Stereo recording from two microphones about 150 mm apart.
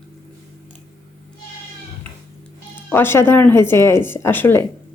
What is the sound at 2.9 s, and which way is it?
Speech, 15° left (ahead or behind).